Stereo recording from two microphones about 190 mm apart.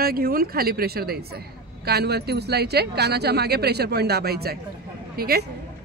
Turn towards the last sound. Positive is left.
turn(degrees=-55)  # may be behind; listen again after turning